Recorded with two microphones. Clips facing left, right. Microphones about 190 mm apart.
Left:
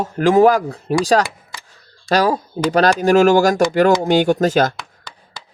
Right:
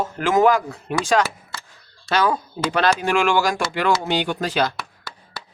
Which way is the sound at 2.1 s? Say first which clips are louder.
Left 4 dB; 40° left (ahead or behind).